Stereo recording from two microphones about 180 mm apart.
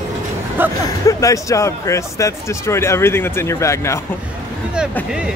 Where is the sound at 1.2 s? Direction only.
15° left (ahead or behind).